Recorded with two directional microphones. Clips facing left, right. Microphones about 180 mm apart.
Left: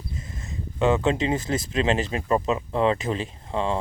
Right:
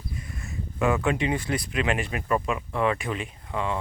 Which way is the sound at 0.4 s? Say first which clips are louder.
Left 3 dB; 20° left (ahead or behind).